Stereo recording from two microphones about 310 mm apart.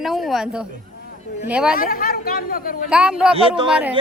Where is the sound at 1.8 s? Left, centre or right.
Left.